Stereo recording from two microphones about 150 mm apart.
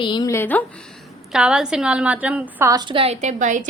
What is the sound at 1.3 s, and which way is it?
A woman's voice, 5° right (ahead or behind).